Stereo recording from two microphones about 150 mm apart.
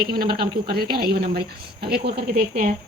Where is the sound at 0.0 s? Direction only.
90° right.